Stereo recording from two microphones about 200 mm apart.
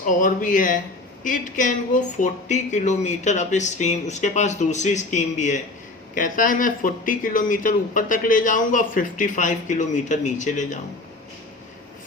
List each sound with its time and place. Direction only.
0.0 s speech: 40° left (ahead or behind)